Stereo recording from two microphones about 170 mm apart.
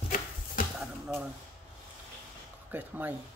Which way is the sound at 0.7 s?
5° right (ahead or behind).